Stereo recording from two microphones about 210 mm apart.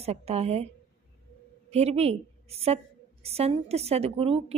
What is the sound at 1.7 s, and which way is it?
A woman's voice, 30° right (ahead or behind).